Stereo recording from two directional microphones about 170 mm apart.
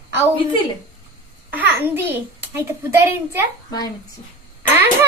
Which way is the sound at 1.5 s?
10° right (ahead or behind).